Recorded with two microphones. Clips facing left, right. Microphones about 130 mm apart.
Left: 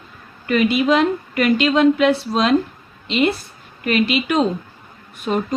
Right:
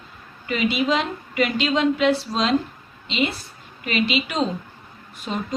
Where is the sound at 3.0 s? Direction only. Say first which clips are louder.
Left 6 dB; 55° left (ahead or behind).